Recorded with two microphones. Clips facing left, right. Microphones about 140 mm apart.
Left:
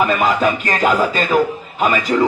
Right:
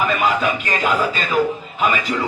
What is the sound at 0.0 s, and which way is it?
Speech, 40° left (ahead or behind).